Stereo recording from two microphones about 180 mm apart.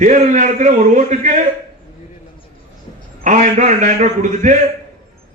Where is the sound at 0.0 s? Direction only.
45° right (ahead or behind).